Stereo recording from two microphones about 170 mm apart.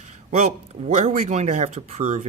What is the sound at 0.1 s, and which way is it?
Speech, 45° right (ahead or behind).